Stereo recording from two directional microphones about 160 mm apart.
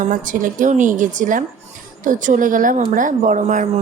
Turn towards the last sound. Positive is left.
turn(degrees=-50)  # may be behind; listen again after turning